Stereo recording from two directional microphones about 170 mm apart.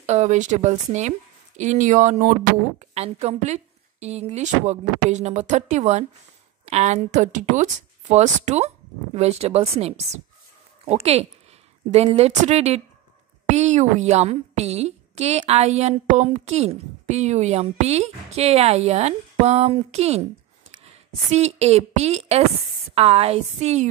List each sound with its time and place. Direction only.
0.0 s a woman's voice: 40° right (ahead or behind)
21.3 s a woman's voice: 40° right (ahead or behind)